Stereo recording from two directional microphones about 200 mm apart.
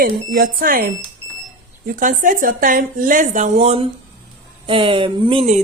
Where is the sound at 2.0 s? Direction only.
40° right (ahead or behind).